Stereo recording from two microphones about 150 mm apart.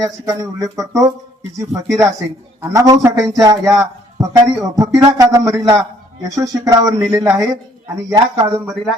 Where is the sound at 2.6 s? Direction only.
20° right (ahead or behind).